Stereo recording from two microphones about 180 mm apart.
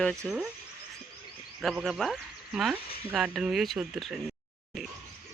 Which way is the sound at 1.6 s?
Centre (ahead or behind).